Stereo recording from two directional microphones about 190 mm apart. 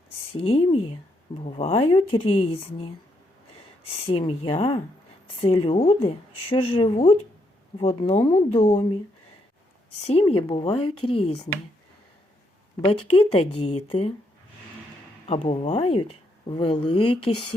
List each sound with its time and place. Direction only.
0.3 s speech: 30° left (ahead or behind)
4.0 s speech: 30° left (ahead or behind)
10.0 s speech: 35° left (ahead or behind)
12.8 s speech: 30° left (ahead or behind)
15.3 s speech: 35° left (ahead or behind)